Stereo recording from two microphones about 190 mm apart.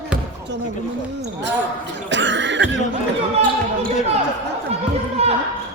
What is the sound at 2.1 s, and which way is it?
Cough, 70° right (ahead or behind).